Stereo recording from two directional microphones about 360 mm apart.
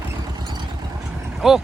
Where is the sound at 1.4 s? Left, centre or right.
Centre.